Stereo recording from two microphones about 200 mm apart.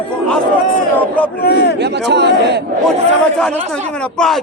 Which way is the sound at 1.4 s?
55° left (ahead or behind).